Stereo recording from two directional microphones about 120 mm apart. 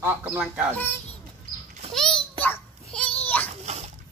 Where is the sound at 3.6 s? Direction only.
65° right (ahead or behind).